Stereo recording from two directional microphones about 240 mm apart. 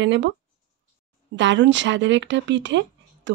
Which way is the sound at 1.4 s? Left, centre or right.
Right.